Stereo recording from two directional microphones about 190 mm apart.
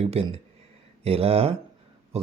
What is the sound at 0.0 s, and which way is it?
Speech, 30° right (ahead or behind).